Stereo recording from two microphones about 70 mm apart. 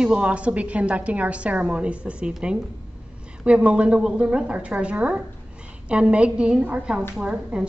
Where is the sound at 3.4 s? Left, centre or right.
Centre.